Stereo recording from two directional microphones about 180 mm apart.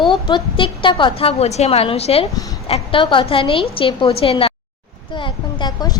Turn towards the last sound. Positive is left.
turn(degrees=20)  # may be behind; listen again after turning